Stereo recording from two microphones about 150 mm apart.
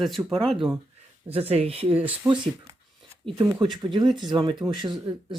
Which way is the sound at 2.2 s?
20° right (ahead or behind).